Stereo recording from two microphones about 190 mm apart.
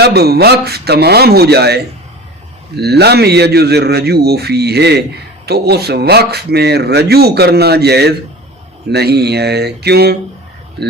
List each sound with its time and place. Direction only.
0.0 s speech: 60° right (ahead or behind)